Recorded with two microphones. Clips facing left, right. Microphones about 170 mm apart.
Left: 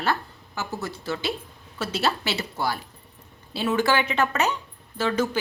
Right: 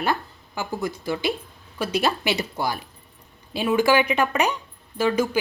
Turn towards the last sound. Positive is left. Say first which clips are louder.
# right 3 dB
turn(degrees=-15)  # may be behind; listen again after turning